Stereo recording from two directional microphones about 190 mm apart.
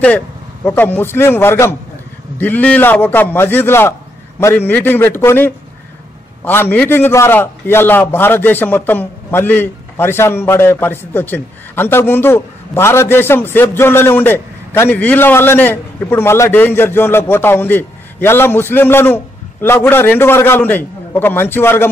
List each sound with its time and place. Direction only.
0.7 s a man's voice: 10° left (ahead or behind)